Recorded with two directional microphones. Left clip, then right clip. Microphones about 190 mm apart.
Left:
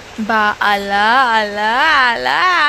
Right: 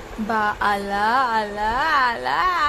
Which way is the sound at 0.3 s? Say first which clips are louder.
Left 7 dB; 20° left (ahead or behind).